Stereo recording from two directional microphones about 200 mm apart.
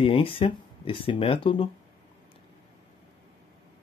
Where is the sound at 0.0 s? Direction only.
25° left (ahead or behind).